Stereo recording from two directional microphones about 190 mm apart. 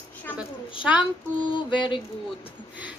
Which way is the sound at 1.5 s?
25° left (ahead or behind).